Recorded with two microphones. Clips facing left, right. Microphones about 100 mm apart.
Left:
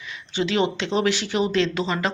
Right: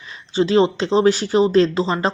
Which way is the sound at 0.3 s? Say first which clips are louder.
Right 7 dB; 35° right (ahead or behind).